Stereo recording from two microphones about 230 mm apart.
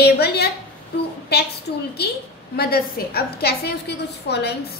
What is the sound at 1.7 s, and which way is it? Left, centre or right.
A woman's voice, left.